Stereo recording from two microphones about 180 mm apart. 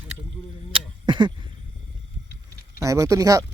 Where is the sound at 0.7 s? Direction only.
25° right (ahead or behind).